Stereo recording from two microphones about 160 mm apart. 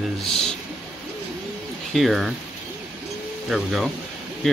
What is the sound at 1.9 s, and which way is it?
Speech, centre (ahead or behind).